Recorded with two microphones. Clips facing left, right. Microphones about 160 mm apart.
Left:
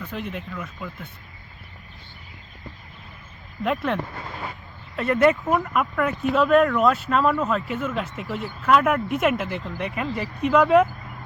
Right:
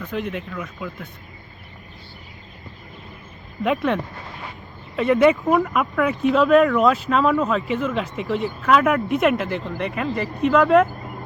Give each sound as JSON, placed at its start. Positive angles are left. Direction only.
{"t": 0.0, "sound": "speech", "side_deg": 10}
{"t": 3.6, "sound": "speech", "side_deg": 0}